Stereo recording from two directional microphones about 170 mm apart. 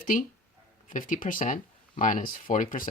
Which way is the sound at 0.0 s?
55° left (ahead or behind).